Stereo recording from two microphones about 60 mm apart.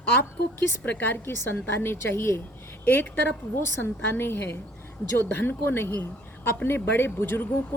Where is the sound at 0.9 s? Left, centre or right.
Left.